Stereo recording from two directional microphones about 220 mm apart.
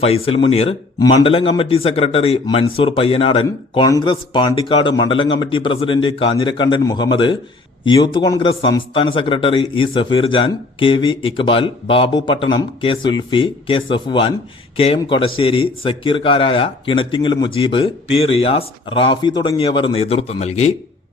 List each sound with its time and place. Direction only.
0.0 s a man's voice: 25° left (ahead or behind)